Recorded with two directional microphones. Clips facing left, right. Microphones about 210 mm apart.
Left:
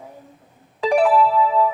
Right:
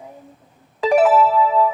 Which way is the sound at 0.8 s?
Centre (ahead or behind).